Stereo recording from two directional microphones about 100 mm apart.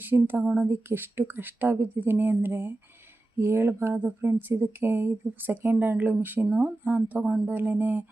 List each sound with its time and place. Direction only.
0.0 s speech: 20° right (ahead or behind)